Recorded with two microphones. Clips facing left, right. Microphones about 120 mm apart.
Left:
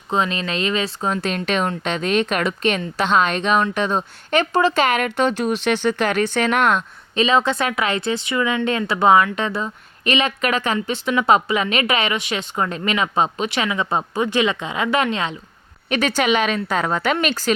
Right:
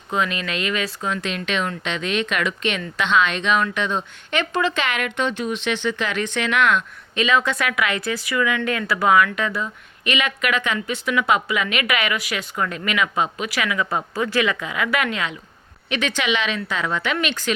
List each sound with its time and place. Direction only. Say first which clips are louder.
0.1 s speech: left 2 dB; 30° left (ahead or behind)
15.9 s a woman's voice: left 4 dB; 40° left (ahead or behind)